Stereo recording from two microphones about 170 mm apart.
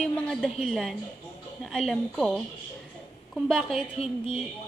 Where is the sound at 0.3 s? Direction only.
Centre (ahead or behind).